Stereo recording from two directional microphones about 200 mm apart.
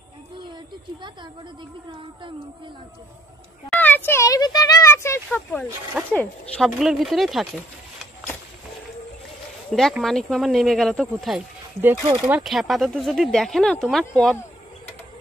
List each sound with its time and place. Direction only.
1.9 s speech: 25° right (ahead or behind)
3.7 s a child's voice: 10° left (ahead or behind)
9.7 s speech: centre (ahead or behind)